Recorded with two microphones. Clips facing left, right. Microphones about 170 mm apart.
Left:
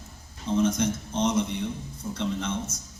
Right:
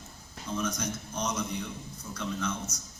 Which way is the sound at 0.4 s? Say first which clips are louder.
Left 9 dB; 25° left (ahead or behind).